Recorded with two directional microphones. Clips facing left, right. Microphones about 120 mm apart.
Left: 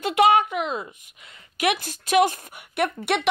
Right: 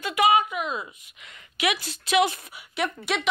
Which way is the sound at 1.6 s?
50° left (ahead or behind).